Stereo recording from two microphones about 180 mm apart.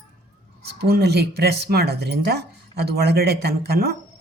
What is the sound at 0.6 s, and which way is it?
Speech, 65° right (ahead or behind).